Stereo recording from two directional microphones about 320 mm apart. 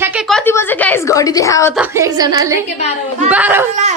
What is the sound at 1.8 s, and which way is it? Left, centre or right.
A woman's voice, centre.